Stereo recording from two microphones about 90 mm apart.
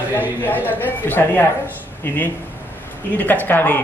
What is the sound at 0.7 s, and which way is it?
Speech, 20° left (ahead or behind).